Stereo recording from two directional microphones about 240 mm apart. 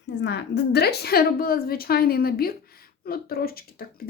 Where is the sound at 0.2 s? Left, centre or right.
Left.